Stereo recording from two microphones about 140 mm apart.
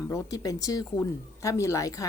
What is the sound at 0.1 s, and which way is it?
Speech, 25° left (ahead or behind).